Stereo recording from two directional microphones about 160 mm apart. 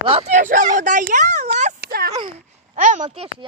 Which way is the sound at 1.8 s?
70° right (ahead or behind).